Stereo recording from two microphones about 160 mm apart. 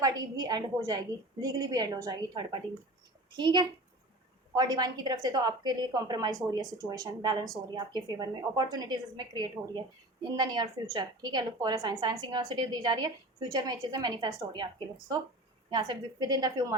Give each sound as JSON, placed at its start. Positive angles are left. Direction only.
{"t": 0.0, "sound": "a woman's voice", "side_deg": -25}
{"t": 15.7, "sound": "a woman's voice", "side_deg": -25}